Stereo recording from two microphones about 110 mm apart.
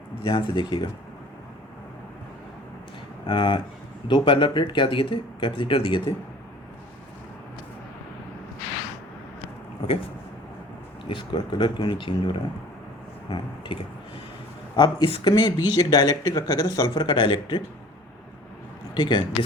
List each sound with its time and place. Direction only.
0.3 s speech: 45° left (ahead or behind)
3.2 s speech: 45° left (ahead or behind)
11.1 s speech: 45° left (ahead or behind)
14.8 s speech: 45° left (ahead or behind)
18.9 s speech: 45° left (ahead or behind)